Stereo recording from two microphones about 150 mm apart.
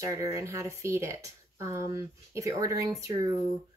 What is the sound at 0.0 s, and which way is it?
Speech, 20° right (ahead or behind).